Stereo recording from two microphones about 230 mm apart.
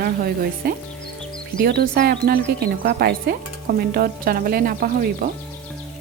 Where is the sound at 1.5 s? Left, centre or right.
Right.